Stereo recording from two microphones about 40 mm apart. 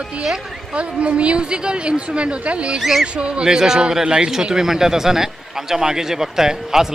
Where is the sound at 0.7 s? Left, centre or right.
Right.